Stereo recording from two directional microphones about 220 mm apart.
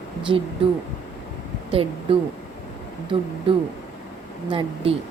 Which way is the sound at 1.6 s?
25° right (ahead or behind).